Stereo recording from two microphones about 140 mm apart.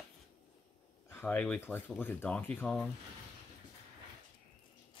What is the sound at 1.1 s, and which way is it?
Speech, 15° left (ahead or behind).